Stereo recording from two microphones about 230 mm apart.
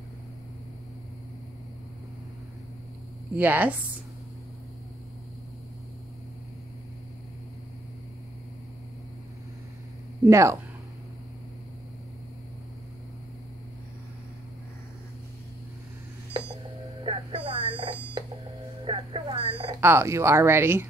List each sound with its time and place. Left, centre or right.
3.3 s speech: centre
10.2 s speech: centre
17.0 s buzzer: right
19.8 s speech: centre